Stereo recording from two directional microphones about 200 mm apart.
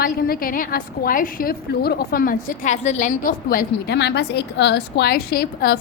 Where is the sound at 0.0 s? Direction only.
45° left (ahead or behind).